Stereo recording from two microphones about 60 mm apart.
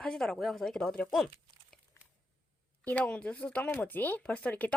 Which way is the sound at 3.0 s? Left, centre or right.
Centre.